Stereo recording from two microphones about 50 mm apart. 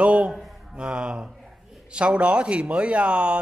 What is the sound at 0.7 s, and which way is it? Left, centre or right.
Speech, right.